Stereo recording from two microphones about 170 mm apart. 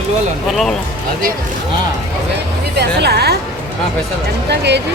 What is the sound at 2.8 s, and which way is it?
Speech, 75° right (ahead or behind).